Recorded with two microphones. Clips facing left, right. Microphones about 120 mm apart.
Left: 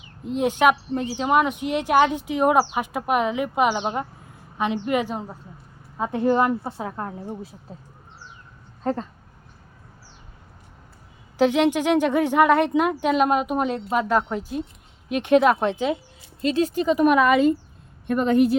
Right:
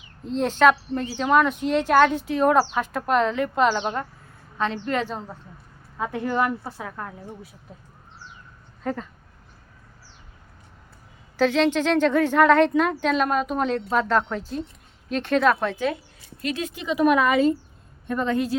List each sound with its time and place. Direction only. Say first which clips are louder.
0.3 s a woman's voice: right 1 dB; 15° left (ahead or behind); by 7.5 s 30° left (ahead or behind)
8.8 s speech: left 3 dB; 30° left (ahead or behind)
11.3 s speech: left 1 dB; 15° left (ahead or behind)
16.4 s speech: left 8 dB; 30° left (ahead or behind); by 17.3 s 55° left (ahead or behind)